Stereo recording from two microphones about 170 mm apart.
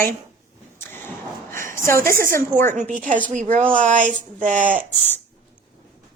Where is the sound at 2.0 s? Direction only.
55° right (ahead or behind).